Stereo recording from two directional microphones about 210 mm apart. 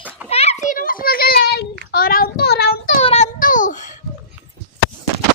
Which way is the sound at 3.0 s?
30° left (ahead or behind).